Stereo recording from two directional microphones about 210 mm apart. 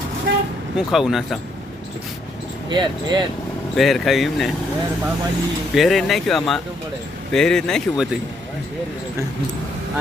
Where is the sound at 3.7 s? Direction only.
Centre (ahead or behind).